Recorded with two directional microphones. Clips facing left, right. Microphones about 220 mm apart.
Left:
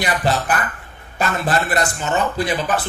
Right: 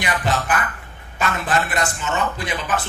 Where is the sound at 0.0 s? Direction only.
35° left (ahead or behind).